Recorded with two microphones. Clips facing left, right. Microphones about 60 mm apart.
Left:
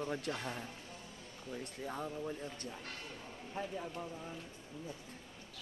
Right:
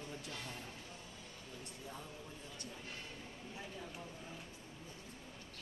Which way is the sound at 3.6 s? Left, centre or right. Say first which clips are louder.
Left 10 dB; left.